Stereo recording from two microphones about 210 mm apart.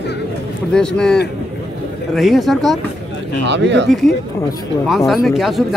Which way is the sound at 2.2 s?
Centre (ahead or behind).